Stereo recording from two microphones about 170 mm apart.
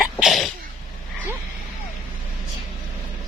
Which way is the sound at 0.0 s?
Centre (ahead or behind).